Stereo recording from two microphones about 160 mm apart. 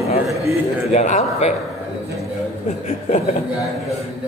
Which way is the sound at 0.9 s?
45° left (ahead or behind).